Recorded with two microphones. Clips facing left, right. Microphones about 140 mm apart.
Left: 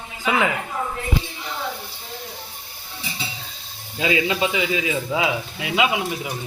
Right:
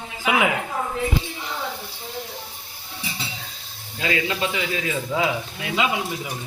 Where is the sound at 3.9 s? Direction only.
15° left (ahead or behind).